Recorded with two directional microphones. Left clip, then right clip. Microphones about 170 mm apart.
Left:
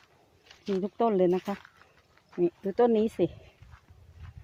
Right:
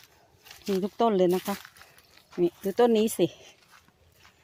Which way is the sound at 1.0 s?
25° right (ahead or behind).